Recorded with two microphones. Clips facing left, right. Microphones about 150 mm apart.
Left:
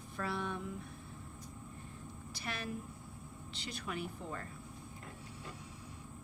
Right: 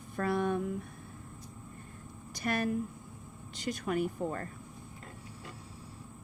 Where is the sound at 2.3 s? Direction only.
45° right (ahead or behind).